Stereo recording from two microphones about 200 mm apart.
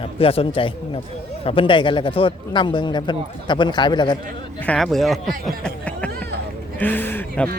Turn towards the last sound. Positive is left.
turn(degrees=10)  # may be behind; listen again after turning